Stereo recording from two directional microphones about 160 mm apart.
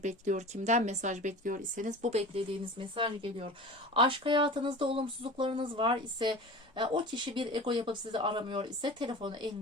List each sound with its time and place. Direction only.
0.0 s speech: 50° right (ahead or behind); by 9.5 s 30° right (ahead or behind)